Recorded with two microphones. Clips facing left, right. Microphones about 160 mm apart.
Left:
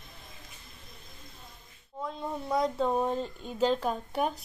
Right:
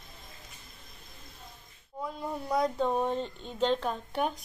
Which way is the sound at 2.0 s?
Centre (ahead or behind).